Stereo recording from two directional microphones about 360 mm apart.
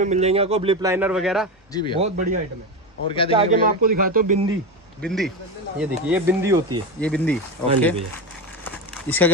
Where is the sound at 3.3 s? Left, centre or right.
Centre.